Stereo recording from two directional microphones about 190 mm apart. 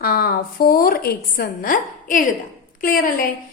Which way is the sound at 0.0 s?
55° left (ahead or behind).